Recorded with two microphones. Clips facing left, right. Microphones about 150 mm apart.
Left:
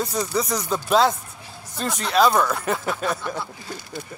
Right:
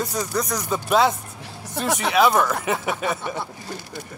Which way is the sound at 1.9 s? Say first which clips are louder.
Right 5 dB; 70° right (ahead or behind).